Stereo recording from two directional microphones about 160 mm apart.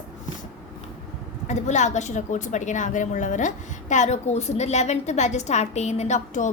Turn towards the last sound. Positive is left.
turn(degrees=50)  # may be behind; listen again after turning